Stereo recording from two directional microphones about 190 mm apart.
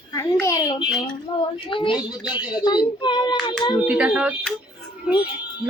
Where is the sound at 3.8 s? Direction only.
5° right (ahead or behind).